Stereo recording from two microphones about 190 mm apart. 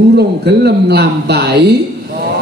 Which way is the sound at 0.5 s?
60° right (ahead or behind).